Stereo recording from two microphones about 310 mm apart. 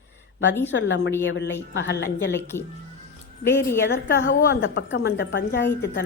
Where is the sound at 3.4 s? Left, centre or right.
Centre.